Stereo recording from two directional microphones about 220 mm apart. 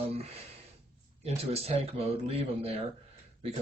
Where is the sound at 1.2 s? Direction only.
30° right (ahead or behind).